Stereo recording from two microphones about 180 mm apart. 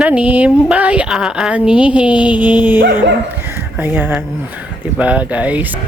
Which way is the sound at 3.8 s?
10° right (ahead or behind).